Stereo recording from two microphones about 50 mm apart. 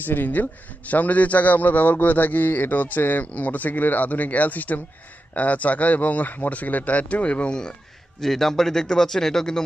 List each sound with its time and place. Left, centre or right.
0.0 s a man's voice: left; by 7.7 s centre
8.2 s a man's voice: centre